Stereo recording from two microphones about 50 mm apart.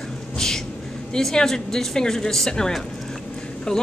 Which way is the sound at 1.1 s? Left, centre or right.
Centre.